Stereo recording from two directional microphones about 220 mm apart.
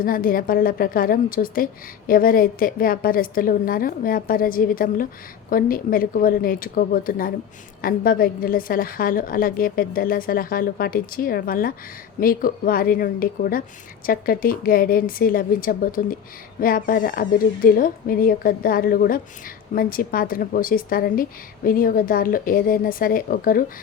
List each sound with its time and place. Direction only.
0.0 s a woman's voice: 40° left (ahead or behind)